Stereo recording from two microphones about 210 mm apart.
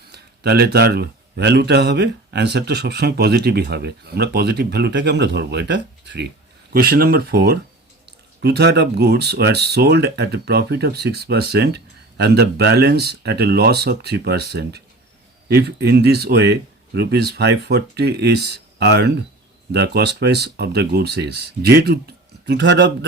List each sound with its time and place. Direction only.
0.1 s a man's voice: 50° right (ahead or behind)